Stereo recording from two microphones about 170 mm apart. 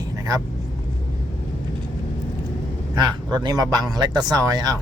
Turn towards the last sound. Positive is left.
turn(degrees=-25)  # may be behind; listen again after turning